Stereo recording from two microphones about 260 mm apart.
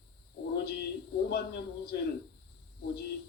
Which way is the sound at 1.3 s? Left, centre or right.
Left.